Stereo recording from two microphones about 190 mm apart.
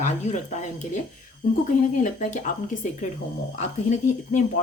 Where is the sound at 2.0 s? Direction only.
40° left (ahead or behind).